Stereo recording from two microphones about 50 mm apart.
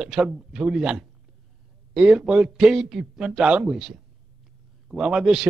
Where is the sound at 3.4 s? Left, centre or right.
Right.